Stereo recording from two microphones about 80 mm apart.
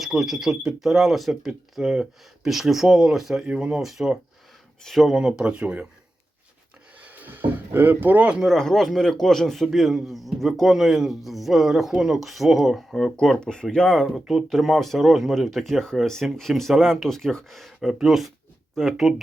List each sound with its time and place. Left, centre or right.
0.0 s a man's voice: centre
7.0 s a sound: right
8.4 s a man's voice: centre